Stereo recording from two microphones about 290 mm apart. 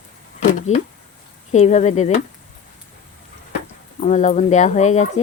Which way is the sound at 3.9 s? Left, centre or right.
Left.